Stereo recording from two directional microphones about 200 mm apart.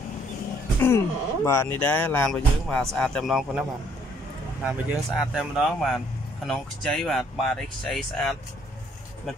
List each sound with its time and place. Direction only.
0.7 s speech: 10° left (ahead or behind)
4.6 s speech: centre (ahead or behind)